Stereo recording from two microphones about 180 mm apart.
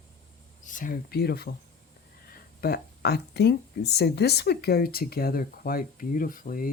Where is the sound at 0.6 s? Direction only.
45° left (ahead or behind).